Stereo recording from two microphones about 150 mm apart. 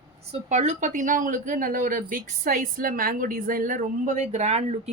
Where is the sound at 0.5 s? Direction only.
50° right (ahead or behind).